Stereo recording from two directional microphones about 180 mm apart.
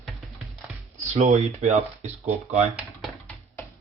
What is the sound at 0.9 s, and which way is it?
Speech, 40° right (ahead or behind).